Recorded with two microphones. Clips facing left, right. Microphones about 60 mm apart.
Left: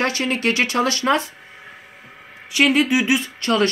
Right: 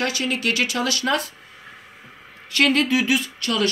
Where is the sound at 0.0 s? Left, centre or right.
Left.